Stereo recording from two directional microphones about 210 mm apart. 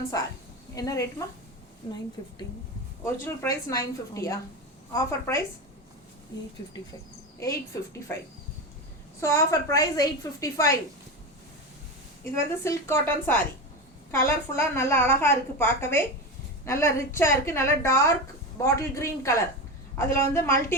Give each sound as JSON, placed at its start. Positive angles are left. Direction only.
{"t": 0.1, "sound": "a woman's voice", "side_deg": 15}
{"t": 3.0, "sound": "a woman's voice", "side_deg": 10}
{"t": 7.3, "sound": "a woman's voice", "side_deg": 15}
{"t": 9.2, "sound": "a woman's voice", "side_deg": 15}
{"t": 12.2, "sound": "a woman's voice", "side_deg": 15}